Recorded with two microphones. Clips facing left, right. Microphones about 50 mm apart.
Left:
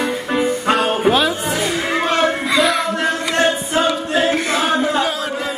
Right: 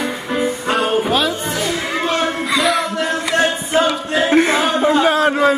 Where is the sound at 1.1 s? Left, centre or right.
Centre.